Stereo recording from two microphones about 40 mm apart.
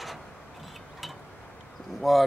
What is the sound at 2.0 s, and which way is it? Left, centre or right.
Cutlery, centre.